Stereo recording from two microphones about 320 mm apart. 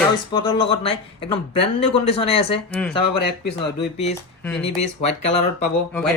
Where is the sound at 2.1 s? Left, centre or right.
Centre.